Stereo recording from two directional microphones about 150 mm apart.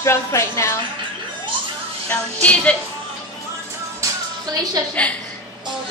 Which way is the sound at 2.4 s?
10° left (ahead or behind).